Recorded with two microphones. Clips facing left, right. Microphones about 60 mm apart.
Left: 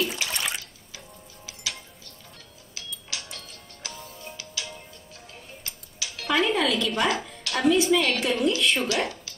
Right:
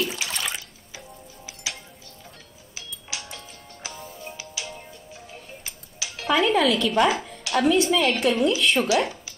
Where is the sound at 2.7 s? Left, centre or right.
Centre.